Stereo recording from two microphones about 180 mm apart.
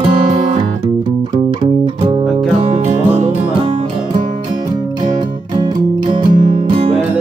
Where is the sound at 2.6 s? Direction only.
35° right (ahead or behind).